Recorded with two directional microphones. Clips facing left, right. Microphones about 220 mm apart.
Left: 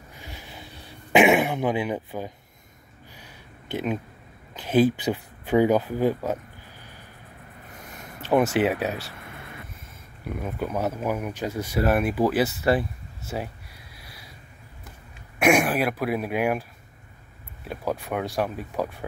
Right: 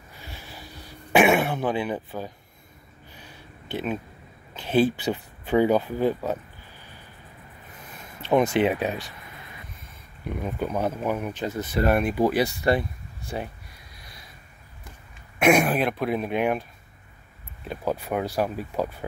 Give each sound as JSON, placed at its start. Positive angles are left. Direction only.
{"t": 0.2, "sound": "a sound", "side_deg": 15}
{"t": 1.1, "sound": "speech", "side_deg": 15}
{"t": 3.2, "sound": "a sound", "side_deg": 10}
{"t": 4.6, "sound": "speech", "side_deg": 10}
{"t": 7.7, "sound": "a sound", "side_deg": 65}
{"t": 8.5, "sound": "speech", "side_deg": 5}
{"t": 10.2, "sound": "speech", "side_deg": 5}
{"t": 15.3, "sound": "speech", "side_deg": 10}
{"t": 17.6, "sound": "speech", "side_deg": 0}